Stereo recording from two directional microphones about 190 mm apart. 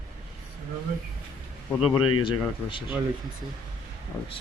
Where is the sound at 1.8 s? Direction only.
25° left (ahead or behind).